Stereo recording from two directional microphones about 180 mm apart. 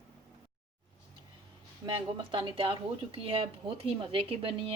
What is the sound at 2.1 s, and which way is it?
A woman's voice, 30° right (ahead or behind).